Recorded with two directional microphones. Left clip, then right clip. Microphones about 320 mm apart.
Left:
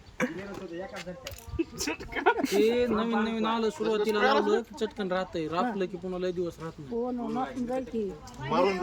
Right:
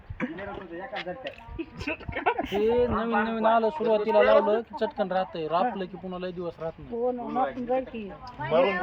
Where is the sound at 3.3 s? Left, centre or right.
Centre.